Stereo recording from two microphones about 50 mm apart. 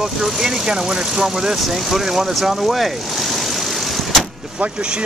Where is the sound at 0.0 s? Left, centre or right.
Centre.